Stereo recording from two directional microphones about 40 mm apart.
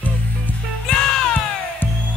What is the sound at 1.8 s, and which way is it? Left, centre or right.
Music, left.